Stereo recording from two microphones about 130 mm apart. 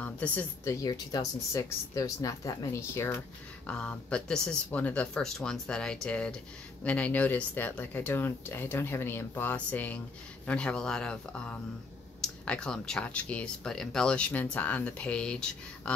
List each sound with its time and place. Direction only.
0.0 s speech: 15° left (ahead or behind)
0.8 s speech: 30° left (ahead or behind)
3.6 s speech: 10° left (ahead or behind)